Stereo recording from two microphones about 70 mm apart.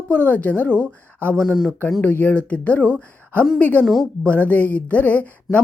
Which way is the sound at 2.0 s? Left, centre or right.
Left.